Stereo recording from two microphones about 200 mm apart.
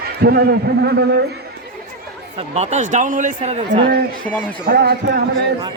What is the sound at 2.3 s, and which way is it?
A man's voice, 30° right (ahead or behind).